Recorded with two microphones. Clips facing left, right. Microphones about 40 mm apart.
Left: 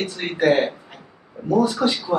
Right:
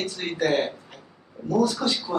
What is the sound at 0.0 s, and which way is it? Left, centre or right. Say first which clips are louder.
Speech: left 5 dB; centre.